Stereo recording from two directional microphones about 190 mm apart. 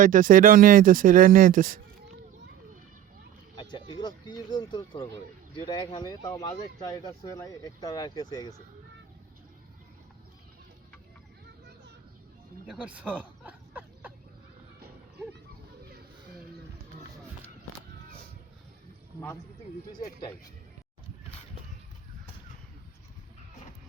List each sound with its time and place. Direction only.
0.0 s speech: 45° right (ahead or behind)
3.5 s speech: 25° left (ahead or behind)
12.6 s a sound: 5° right (ahead or behind)
20.0 s speech: 20° left (ahead or behind)